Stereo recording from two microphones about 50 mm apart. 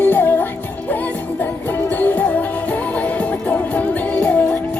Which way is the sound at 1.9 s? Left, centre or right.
Left.